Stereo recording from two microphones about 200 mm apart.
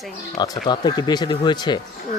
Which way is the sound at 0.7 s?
20° left (ahead or behind).